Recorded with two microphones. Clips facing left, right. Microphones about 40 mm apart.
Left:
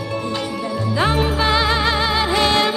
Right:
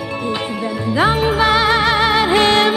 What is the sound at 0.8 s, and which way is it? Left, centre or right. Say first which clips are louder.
Music: right 4 dB; right.